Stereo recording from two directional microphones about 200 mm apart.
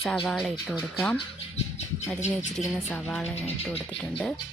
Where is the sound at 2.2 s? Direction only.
35° left (ahead or behind).